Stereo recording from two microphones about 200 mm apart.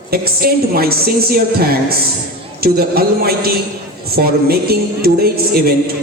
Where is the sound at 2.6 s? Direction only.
50° right (ahead or behind).